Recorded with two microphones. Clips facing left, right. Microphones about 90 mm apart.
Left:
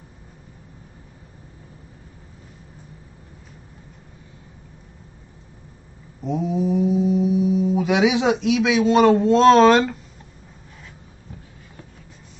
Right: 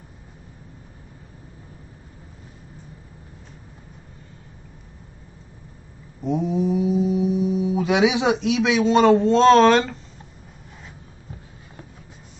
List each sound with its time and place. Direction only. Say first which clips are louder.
6.2 s speech: right 1 dB; centre (ahead or behind)